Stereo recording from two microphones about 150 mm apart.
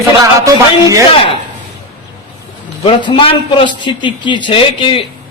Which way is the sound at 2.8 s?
35° left (ahead or behind).